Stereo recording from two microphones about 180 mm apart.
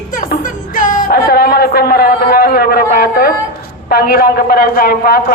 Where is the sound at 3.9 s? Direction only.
55° left (ahead or behind).